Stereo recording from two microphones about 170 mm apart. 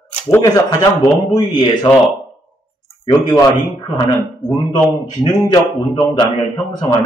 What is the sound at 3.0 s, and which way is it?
A man's voice, 20° left (ahead or behind).